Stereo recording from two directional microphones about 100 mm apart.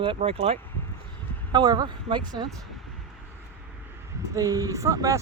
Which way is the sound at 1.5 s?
45° right (ahead or behind).